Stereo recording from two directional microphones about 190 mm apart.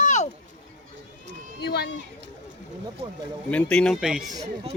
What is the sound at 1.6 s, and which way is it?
Run, 55° left (ahead or behind).